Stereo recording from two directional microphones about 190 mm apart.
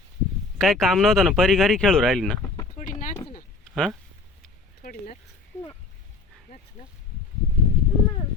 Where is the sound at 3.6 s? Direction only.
5° left (ahead or behind).